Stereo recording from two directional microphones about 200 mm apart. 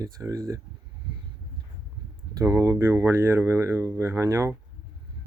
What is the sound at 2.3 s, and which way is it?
Speech, 15° right (ahead or behind).